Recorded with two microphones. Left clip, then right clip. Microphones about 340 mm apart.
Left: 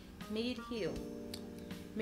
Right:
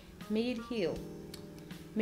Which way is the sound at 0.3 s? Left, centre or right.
Right.